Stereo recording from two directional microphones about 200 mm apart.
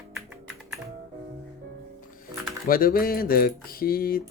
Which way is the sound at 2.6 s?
45° left (ahead or behind).